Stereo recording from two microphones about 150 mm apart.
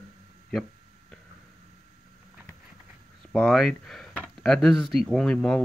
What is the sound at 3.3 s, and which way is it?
Speech, 5° left (ahead or behind).